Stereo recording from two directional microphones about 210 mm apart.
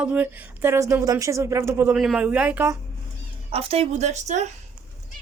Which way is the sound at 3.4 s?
30° right (ahead or behind).